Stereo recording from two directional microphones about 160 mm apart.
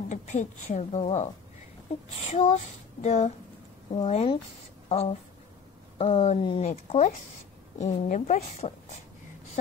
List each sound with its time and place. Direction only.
0.1 s a woman's voice: 45° left (ahead or behind)
2.2 s female singing: 40° left (ahead or behind)
4.8 s writing: 35° left (ahead or behind)
5.9 s female singing: 40° left (ahead or behind)
6.7 s a woman's voice: 45° left (ahead or behind)